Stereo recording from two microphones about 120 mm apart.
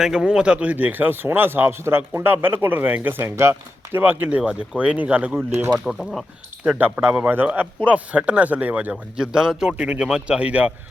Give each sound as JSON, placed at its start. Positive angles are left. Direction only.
{"t": 0.0, "sound": "speech", "side_deg": -5}
{"t": 6.7, "sound": "speech", "side_deg": -15}